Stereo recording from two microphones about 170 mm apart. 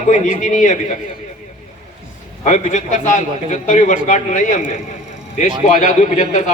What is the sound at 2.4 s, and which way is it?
A man's voice, 45° left (ahead or behind).